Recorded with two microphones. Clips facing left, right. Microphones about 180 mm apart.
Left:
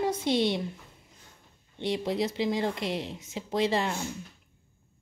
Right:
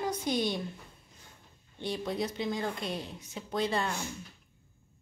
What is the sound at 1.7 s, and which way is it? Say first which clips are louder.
A woman's voice: left 5 dB; 25° left (ahead or behind).